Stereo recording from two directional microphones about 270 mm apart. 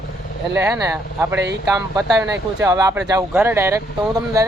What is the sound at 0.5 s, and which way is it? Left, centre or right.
Speech, centre.